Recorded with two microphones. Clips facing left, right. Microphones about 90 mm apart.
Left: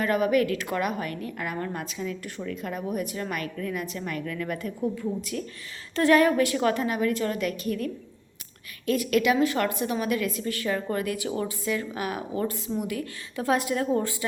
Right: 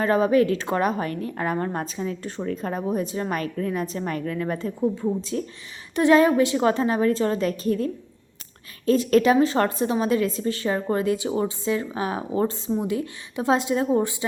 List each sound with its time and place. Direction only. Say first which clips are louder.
0.0 s a woman's voice: right 4 dB; 30° right (ahead or behind)
8.9 s a woman's voice: right 5 dB; 35° right (ahead or behind)